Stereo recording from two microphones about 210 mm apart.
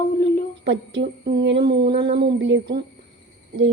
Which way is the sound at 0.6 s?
60° right (ahead or behind).